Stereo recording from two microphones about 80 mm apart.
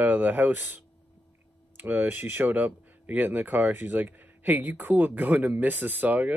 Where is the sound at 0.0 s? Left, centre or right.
Right.